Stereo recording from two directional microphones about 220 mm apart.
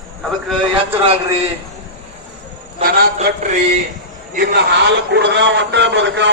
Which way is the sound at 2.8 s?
40° right (ahead or behind).